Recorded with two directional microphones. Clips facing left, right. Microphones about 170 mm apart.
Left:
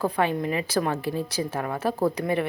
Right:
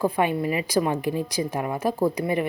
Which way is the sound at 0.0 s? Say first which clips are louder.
Right 2 dB; 10° right (ahead or behind).